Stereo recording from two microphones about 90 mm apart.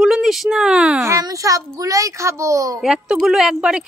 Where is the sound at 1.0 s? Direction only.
40° right (ahead or behind).